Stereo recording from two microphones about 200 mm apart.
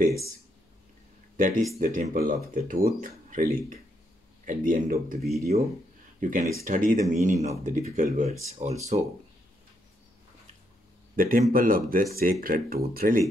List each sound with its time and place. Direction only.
1.3 s speech: 40° right (ahead or behind)
11.1 s speech: 45° right (ahead or behind)